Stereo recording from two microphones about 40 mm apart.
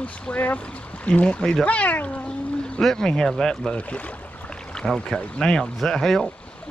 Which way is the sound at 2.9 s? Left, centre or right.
Centre.